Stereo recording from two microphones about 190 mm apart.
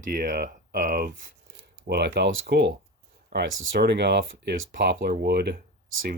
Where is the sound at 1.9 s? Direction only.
60° right (ahead or behind).